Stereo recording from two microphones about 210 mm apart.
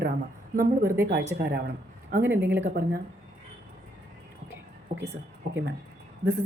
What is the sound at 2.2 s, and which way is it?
Speech, 10° right (ahead or behind).